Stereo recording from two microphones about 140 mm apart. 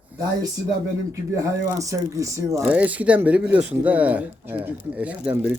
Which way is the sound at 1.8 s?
20° right (ahead or behind).